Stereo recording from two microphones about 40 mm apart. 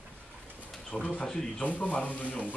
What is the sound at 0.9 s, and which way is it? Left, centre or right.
Speech, left.